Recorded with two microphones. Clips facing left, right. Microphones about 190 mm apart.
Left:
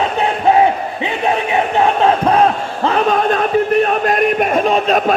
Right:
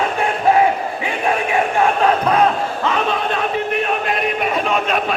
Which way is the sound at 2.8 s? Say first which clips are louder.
Left 7 dB; 35° left (ahead or behind).